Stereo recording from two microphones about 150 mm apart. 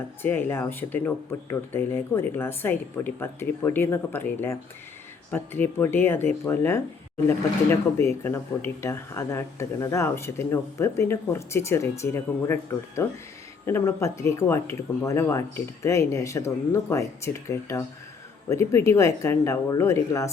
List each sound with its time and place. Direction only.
0.2 s speech: 15° left (ahead or behind)